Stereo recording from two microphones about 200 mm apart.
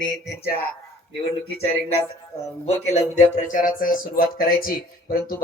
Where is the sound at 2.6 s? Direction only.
35° left (ahead or behind).